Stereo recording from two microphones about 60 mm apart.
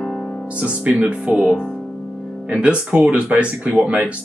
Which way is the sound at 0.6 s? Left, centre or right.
Centre.